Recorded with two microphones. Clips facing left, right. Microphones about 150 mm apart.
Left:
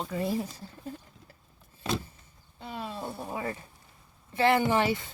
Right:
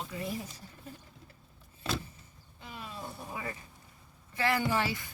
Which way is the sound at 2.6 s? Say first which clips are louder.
Left 7 dB; 30° left (ahead or behind).